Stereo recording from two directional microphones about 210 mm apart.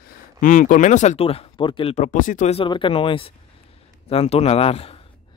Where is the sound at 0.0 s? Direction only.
40° left (ahead or behind).